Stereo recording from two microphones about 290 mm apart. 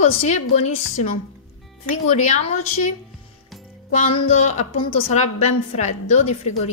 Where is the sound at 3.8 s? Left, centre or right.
Left.